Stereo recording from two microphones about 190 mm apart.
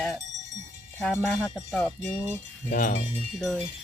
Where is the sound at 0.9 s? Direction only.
Centre (ahead or behind).